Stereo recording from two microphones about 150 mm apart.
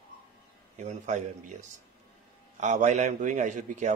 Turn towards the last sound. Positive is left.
turn(degrees=-55)  # may be behind; listen again after turning